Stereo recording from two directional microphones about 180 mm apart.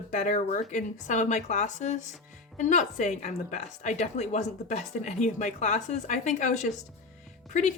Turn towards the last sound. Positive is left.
turn(degrees=40)  # may be behind; listen again after turning